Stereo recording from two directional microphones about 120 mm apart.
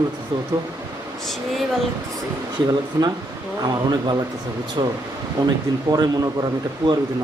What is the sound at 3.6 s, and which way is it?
A man's voice, 35° right (ahead or behind).